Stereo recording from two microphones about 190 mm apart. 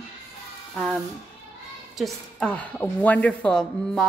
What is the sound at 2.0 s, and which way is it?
A woman's voice, 5° left (ahead or behind).